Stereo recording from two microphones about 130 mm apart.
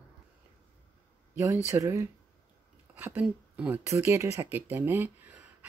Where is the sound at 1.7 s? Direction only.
20° right (ahead or behind).